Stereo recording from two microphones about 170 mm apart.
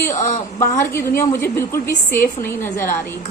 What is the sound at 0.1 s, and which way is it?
Speech, 45° left (ahead or behind).